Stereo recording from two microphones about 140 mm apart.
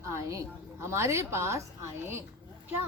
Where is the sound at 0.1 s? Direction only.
20° right (ahead or behind).